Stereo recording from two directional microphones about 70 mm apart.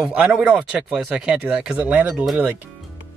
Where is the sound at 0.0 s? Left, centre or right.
Centre.